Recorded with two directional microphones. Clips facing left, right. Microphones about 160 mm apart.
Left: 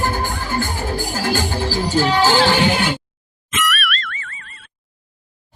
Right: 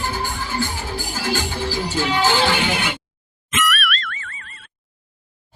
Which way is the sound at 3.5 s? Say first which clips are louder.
Even; centre (ahead or behind).